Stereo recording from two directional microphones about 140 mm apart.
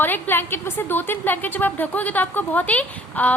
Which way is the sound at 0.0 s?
15° left (ahead or behind).